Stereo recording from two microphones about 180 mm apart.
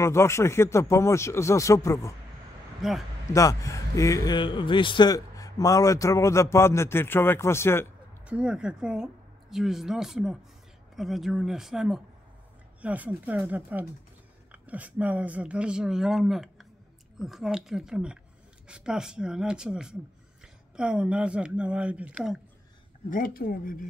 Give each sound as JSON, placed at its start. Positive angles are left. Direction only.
{"t": 0.0, "sound": "a man's voice", "side_deg": 15}
{"t": 2.8, "sound": "speech", "side_deg": 0}
{"t": 3.3, "sound": "a man's voice", "side_deg": 15}
{"t": 8.3, "sound": "speech", "side_deg": -5}
{"t": 23.0, "sound": "speech", "side_deg": 50}